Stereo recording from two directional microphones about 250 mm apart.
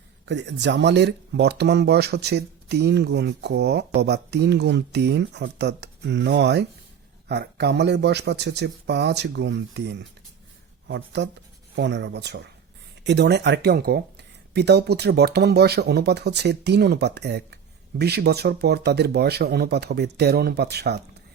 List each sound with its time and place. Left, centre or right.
0.3 s speech: right